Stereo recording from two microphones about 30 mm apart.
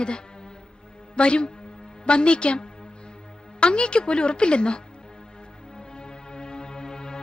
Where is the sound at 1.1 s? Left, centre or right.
Left.